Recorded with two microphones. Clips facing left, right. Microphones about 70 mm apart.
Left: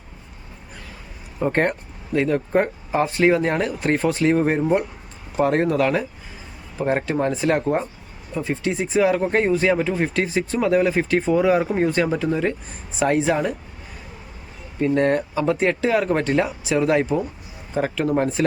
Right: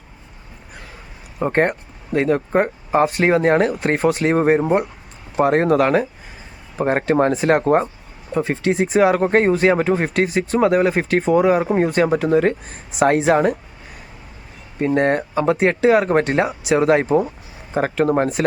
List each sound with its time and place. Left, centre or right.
1.4 s speech: right
11.6 s speech: right
12.2 s speech: right
14.8 s speech: right